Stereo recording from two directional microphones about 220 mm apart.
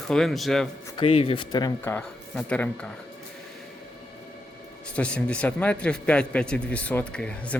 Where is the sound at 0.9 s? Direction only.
25° left (ahead or behind); by 2.6 s 5° left (ahead or behind).